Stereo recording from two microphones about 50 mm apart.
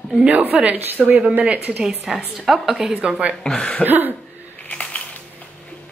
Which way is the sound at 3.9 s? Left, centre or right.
Right.